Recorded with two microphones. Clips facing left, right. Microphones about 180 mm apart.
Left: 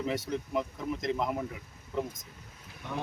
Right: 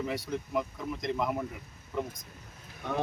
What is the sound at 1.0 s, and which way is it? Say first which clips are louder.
Speech: right 1 dB; centre (ahead or behind).